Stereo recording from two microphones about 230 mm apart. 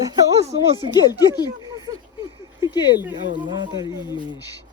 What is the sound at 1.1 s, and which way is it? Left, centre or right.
Speech, centre.